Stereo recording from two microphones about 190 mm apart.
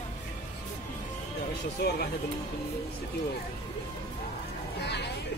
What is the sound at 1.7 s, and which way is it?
Speech, 55° left (ahead or behind).